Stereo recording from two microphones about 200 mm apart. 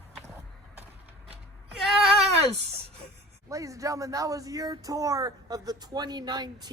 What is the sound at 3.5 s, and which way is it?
Speech, 15° right (ahead or behind).